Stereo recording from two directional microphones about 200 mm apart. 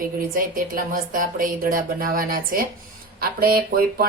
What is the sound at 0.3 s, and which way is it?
Speech, 45° right (ahead or behind).